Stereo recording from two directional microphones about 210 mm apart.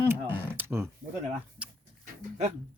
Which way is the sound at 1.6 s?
5° right (ahead or behind).